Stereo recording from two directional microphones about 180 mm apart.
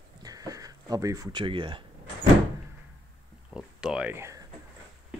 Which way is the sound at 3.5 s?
5° right (ahead or behind).